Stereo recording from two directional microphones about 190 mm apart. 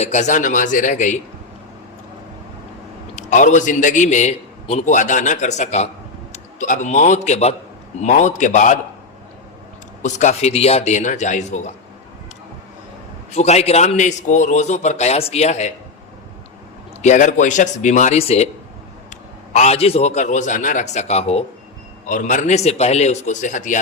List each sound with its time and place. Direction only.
0.0 s a man's voice: 40° left (ahead or behind)
3.2 s a man's voice: 40° left (ahead or behind)
10.0 s a man's voice: 40° left (ahead or behind)
13.3 s a man's voice: 35° left (ahead or behind)
17.0 s a man's voice: 40° left (ahead or behind)